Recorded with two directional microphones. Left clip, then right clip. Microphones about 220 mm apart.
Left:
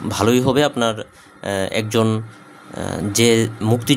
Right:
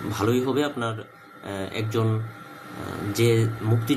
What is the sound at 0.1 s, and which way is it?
Speech, 50° left (ahead or behind).